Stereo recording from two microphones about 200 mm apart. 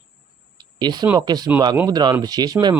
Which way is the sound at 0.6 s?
20° right (ahead or behind).